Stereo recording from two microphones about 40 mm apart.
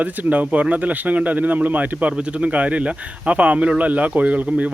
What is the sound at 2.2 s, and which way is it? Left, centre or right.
A man's voice, right.